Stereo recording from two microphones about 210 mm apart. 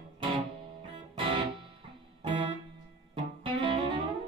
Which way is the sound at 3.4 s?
25° right (ahead or behind).